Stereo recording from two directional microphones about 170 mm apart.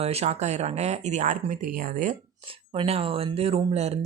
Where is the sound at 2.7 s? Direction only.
35° right (ahead or behind).